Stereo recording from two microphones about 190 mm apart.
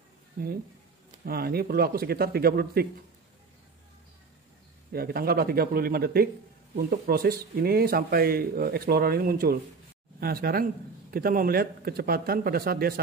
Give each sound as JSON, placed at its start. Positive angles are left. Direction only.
{"t": 0.4, "sound": "speech", "side_deg": -45}
{"t": 4.9, "sound": "speech", "side_deg": -55}